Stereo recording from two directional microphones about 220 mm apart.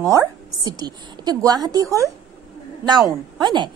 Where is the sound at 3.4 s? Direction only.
20° right (ahead or behind).